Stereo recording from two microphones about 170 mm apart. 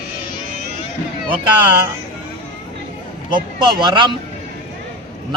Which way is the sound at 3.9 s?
25° right (ahead or behind).